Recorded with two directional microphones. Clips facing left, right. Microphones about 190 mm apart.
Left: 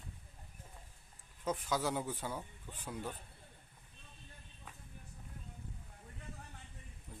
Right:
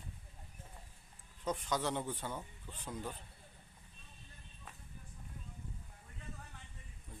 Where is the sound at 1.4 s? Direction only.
5° left (ahead or behind).